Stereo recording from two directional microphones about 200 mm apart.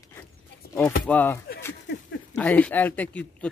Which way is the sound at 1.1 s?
10° left (ahead or behind).